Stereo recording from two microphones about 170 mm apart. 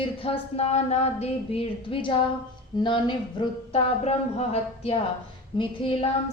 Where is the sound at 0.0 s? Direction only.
35° left (ahead or behind).